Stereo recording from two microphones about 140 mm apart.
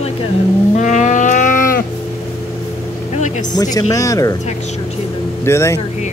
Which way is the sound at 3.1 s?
60° left (ahead or behind).